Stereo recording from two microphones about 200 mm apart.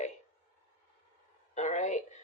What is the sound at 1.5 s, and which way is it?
Speech, 35° left (ahead or behind).